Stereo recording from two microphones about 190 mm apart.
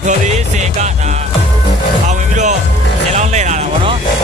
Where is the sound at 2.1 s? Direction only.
40° right (ahead or behind).